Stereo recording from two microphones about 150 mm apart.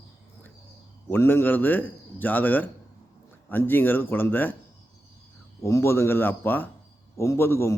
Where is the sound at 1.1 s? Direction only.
15° left (ahead or behind).